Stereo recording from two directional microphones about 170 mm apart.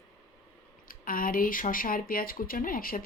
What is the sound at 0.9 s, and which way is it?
A woman's voice, 55° left (ahead or behind).